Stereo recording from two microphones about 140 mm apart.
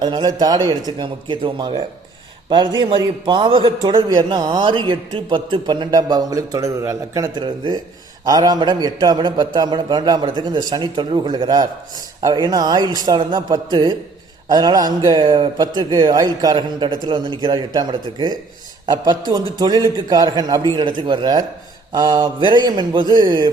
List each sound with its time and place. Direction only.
0.0 s a man's voice: 30° right (ahead or behind)